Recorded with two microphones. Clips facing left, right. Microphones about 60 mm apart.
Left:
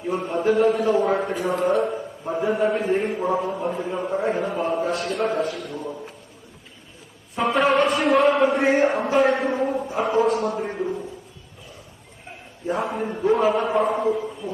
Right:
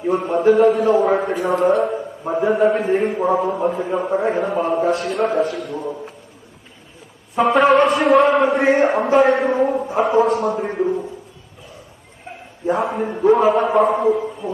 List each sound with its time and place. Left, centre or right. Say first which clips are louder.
0.1 s a man's voice: right 6 dB; centre
3.2 s a man's voice: right 5 dB; right
3.4 s a man's voice: right 6 dB; centre
3.8 s a man's voice: right 5 dB; centre
7.3 s a man's voice: right 6 dB; centre
12.7 s a man's voice: right 4 dB; centre